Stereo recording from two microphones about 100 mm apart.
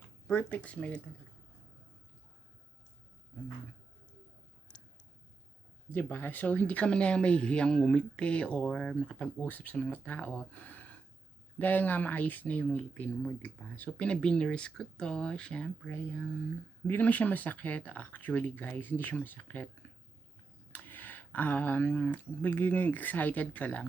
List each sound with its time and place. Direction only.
0.3 s speech: 20° left (ahead or behind)
5.9 s speech: 20° left (ahead or behind)